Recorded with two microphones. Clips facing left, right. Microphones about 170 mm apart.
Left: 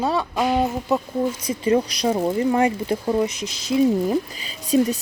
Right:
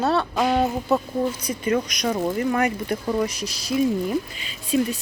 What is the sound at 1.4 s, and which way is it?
Speech, 30° left (ahead or behind).